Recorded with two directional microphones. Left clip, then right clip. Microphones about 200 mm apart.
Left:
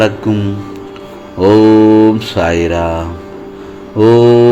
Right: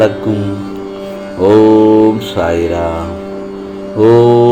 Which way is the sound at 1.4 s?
30° left (ahead or behind).